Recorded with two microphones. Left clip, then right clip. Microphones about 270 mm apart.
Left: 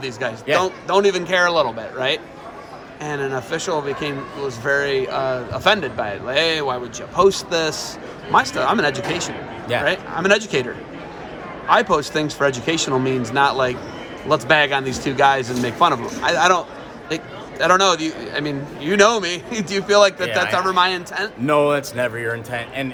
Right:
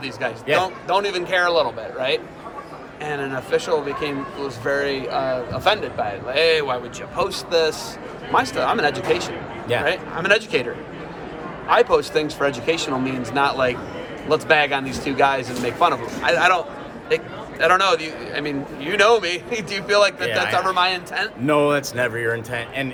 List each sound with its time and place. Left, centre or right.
0.0 s a man's voice: left
11.7 s speech: left
21.4 s a man's voice: centre